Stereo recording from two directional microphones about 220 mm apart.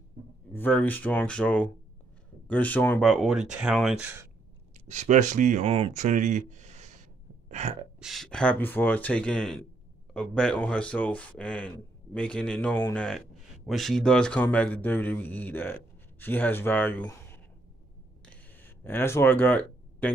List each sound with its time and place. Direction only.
0.5 s a man's voice: 10° left (ahead or behind); by 4.3 s 10° right (ahead or behind)
4.8 s speech: 30° right (ahead or behind)
7.4 s gasp: 30° right (ahead or behind)
8.0 s a man's voice: centre (ahead or behind)
18.2 s a sound: 10° left (ahead or behind)